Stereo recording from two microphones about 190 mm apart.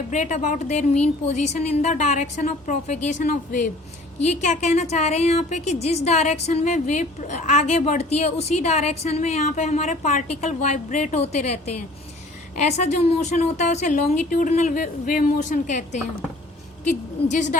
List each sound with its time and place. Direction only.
0.1 s a woman's voice: 40° left (ahead or behind)